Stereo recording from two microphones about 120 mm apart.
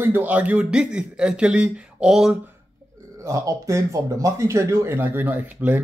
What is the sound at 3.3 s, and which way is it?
Speech, 25° right (ahead or behind).